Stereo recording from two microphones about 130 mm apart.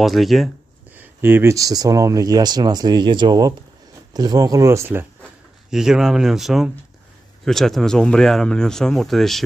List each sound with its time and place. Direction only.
0.0 s speech: centre (ahead or behind)
0.9 s speech: 15° right (ahead or behind)
5.7 s speech: 5° right (ahead or behind)